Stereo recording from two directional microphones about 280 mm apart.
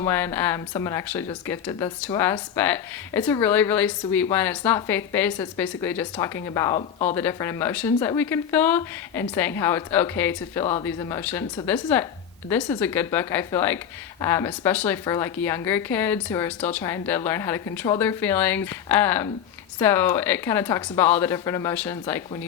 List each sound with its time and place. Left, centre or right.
0.0 s speech: centre
10.6 s speech: centre
10.8 s speech: centre